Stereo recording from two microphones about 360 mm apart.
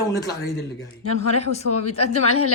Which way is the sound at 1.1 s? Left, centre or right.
Left.